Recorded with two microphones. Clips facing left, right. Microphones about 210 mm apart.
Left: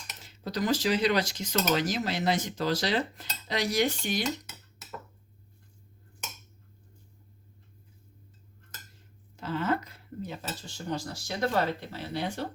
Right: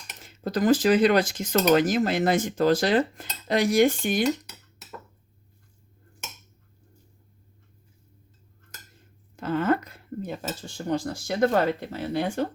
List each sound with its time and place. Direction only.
0.3 s speech: 50° right (ahead or behind)
9.3 s speech: 50° right (ahead or behind)